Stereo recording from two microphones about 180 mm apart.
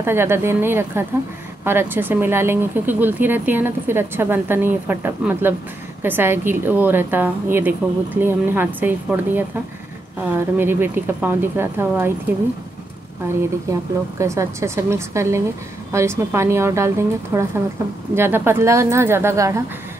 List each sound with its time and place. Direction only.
0.0 s speech: 15° right (ahead or behind)
13.7 s speech: 15° right (ahead or behind)